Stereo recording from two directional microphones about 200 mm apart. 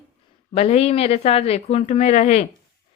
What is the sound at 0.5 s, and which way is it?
Speech, 30° left (ahead or behind).